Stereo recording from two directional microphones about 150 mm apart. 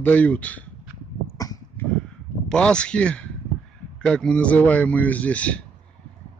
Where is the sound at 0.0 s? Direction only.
10° left (ahead or behind).